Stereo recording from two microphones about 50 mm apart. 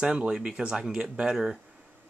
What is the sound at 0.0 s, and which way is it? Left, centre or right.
Speech, centre.